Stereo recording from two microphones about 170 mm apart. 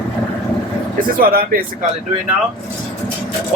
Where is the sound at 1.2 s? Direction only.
60° right (ahead or behind).